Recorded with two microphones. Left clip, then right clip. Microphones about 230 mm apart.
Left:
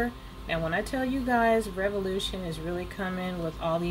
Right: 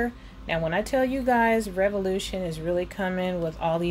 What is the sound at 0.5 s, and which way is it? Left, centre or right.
A woman's voice, right.